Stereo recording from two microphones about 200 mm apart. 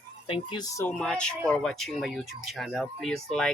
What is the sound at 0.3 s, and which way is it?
Speech, 20° left (ahead or behind).